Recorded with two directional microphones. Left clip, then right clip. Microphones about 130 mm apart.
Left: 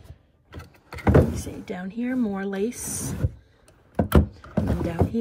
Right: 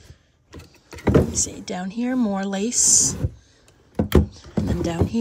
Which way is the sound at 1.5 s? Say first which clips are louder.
Right 4 dB; centre (ahead or behind).